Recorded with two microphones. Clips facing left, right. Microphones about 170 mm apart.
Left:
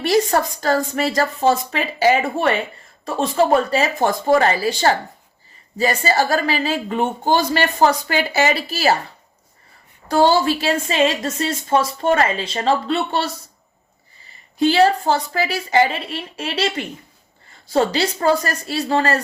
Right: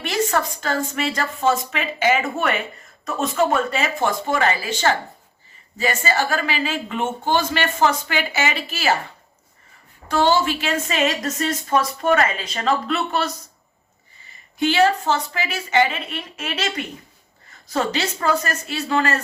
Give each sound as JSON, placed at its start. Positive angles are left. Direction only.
{"t": 0.0, "sound": "a woman's voice", "side_deg": 35}
{"t": 10.1, "sound": "a woman's voice", "side_deg": 35}
{"t": 14.6, "sound": "a woman's voice", "side_deg": 35}